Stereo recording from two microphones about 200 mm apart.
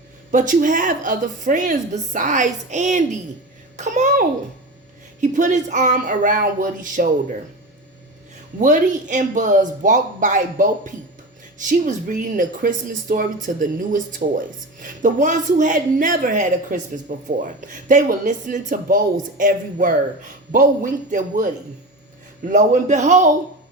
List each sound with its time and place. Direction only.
0.3 s a child's voice: 40° right (ahead or behind)
8.5 s a woman's voice: 40° right (ahead or behind)